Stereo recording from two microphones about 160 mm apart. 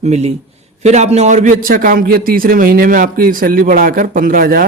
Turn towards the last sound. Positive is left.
turn(degrees=-65)  # may be behind; listen again after turning